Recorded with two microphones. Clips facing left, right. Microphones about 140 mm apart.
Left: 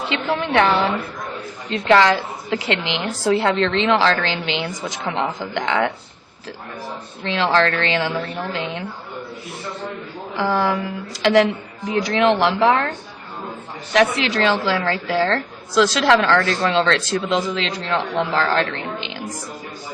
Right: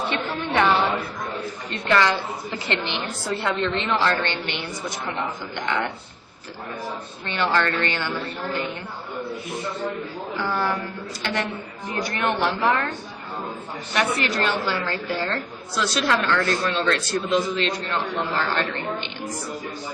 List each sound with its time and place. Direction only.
0.3 s a sound: 90° left
1.9 s a woman's voice: 90° left
7.3 s a woman's voice: 90° left
10.3 s a woman's voice: 90° left
13.9 s a woman's voice: 90° left